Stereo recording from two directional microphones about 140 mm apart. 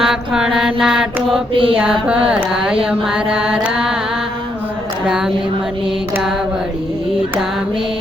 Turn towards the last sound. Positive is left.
turn(degrees=-5)  # may be behind; listen again after turning